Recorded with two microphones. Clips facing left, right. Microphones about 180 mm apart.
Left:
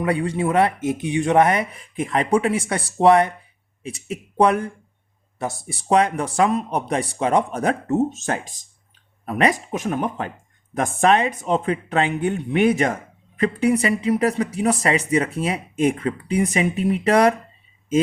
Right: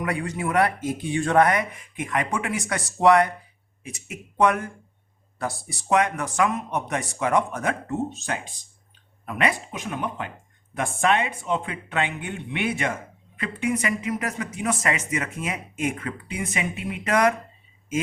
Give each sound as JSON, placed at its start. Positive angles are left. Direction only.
{"t": 0.0, "sound": "speech", "side_deg": 30}